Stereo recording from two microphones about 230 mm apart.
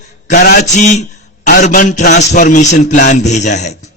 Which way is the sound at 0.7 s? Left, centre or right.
Left.